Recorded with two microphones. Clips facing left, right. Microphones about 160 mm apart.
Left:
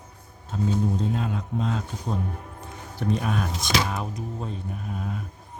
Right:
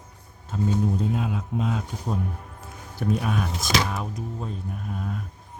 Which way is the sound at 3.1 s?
5° right (ahead or behind).